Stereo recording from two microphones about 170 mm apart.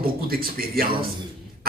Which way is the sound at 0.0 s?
60° right (ahead or behind).